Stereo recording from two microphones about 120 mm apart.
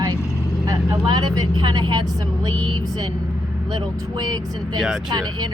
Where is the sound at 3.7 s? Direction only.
30° right (ahead or behind).